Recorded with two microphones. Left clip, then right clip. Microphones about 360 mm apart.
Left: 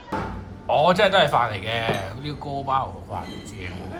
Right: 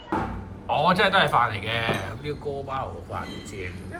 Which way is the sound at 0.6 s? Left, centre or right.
Centre.